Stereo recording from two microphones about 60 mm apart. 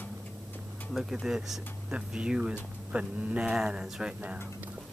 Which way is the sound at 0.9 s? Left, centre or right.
Centre.